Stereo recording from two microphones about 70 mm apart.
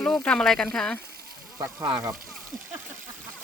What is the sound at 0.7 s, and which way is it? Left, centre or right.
Speech, centre.